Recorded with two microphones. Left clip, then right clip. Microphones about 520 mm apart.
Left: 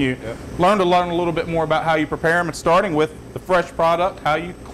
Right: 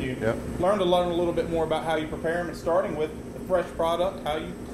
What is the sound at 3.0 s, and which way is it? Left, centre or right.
A man's voice, left.